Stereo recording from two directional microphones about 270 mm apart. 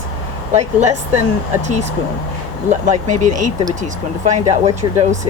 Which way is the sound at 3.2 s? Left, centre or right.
Right.